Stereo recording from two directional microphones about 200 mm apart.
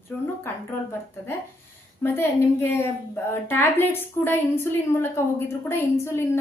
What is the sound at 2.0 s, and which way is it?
A woman's voice, 10° left (ahead or behind).